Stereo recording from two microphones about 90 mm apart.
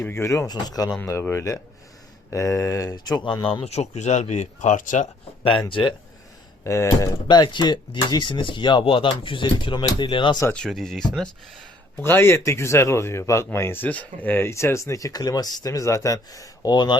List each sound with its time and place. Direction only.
0.0 s speech: 30° left (ahead or behind)
0.4 s speech: 50° left (ahead or behind)
1.0 s speech: 30° left (ahead or behind); by 3.7 s 80° left
5.4 s speech: 75° left (ahead or behind)
6.7 s speech: 35° left (ahead or behind)
7.3 s speech: 55° left (ahead or behind)
10.5 s speech: 5° left (ahead or behind)
12.0 s speech: 25° left (ahead or behind); by 17.0 s 55° left (ahead or behind)